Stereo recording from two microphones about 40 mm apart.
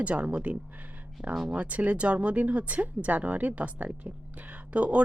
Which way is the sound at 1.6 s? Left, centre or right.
Right.